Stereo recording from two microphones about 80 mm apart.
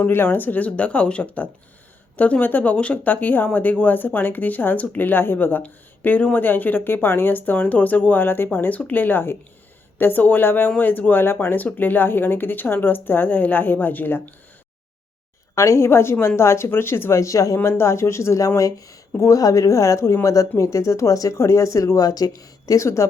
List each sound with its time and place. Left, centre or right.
0.1 s speech: left
15.5 s speech: left